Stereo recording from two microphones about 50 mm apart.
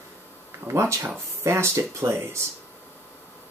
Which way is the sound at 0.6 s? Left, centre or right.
Right.